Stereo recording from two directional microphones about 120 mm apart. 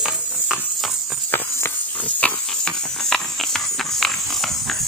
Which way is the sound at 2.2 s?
10° left (ahead or behind).